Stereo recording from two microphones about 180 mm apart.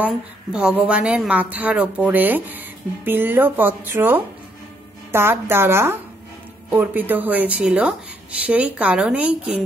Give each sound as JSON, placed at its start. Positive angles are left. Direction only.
{"t": 0.0, "sound": "a woman's voice", "side_deg": -5}